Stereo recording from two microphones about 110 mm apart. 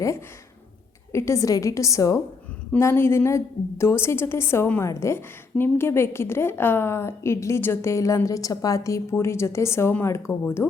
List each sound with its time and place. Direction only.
1.1 s a woman's voice: 25° left (ahead or behind)